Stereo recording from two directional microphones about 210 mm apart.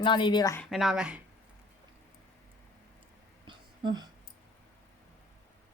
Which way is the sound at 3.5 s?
20° right (ahead or behind).